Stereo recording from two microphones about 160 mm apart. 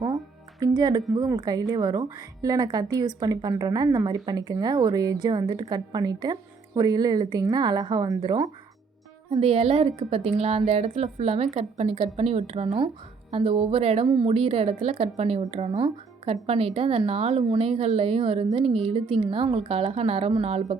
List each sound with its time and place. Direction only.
0.6 s a woman's voice: 25° right (ahead or behind)
9.3 s a woman's voice: 40° right (ahead or behind)